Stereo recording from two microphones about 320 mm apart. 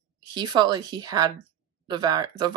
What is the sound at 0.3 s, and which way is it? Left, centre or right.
Speech, centre.